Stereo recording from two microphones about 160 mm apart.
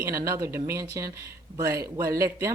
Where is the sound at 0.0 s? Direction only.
20° right (ahead or behind).